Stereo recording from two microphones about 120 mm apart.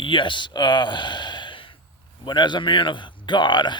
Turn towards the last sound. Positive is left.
turn(degrees=40)  # may be behind; listen again after turning